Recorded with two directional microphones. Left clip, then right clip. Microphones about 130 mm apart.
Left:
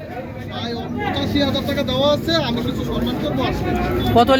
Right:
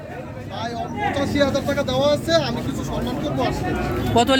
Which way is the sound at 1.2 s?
75° right (ahead or behind).